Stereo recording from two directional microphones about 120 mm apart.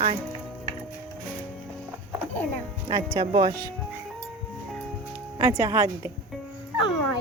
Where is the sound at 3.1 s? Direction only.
40° right (ahead or behind).